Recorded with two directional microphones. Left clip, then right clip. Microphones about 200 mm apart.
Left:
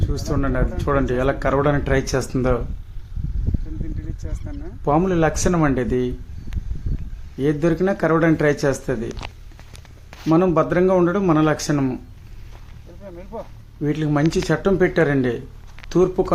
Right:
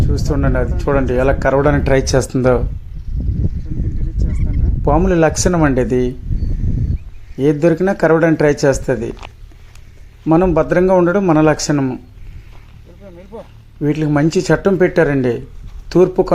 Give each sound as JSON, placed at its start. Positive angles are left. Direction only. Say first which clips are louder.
{"t": 0.1, "sound": "speech", "louder": "right 4 dB", "side_deg": -10}
{"t": 4.9, "sound": "speech", "louder": "right 5 dB", "side_deg": -15}
{"t": 7.3, "sound": "speech", "louder": "right 6 dB", "side_deg": -15}
{"t": 10.2, "sound": "speech", "louder": "right 4 dB", "side_deg": -10}
{"t": 13.8, "sound": "speech", "louder": "right 5 dB", "side_deg": -15}